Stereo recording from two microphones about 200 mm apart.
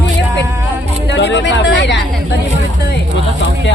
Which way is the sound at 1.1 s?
60° left (ahead or behind).